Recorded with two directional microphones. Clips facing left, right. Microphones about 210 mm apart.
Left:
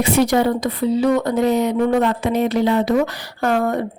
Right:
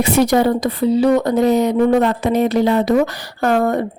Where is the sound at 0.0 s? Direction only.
40° right (ahead or behind).